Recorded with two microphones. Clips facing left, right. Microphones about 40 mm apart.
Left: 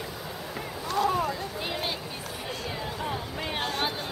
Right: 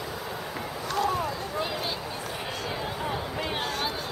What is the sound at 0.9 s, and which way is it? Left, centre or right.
Boat, centre.